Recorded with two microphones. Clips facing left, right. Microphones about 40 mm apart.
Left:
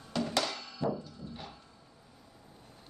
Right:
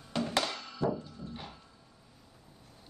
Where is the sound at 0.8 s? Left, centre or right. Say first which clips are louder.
Right 1 dB; centre.